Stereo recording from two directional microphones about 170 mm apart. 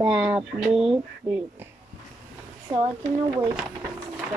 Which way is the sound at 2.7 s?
25° right (ahead or behind).